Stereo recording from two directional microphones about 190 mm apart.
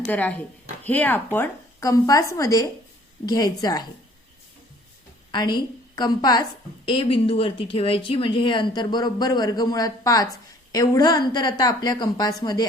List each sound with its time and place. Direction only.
0.0 s a woman's voice: 5° left (ahead or behind)
5.3 s a woman's voice: 25° left (ahead or behind)